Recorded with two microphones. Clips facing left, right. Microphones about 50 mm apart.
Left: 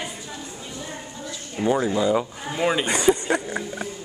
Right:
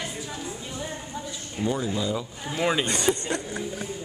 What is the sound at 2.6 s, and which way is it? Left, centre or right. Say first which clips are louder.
Speech: left 3 dB; centre.